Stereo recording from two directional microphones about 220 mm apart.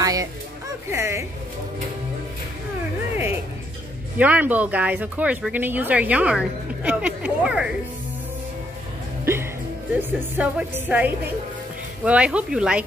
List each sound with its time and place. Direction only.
0.0 s speech: 15° right (ahead or behind)
4.2 s speech: 5° right (ahead or behind)
9.2 s music: 10° right (ahead or behind)
9.9 s speech: 10° right (ahead or behind)